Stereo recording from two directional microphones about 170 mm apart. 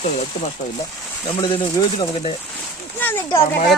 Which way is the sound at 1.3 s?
25° left (ahead or behind).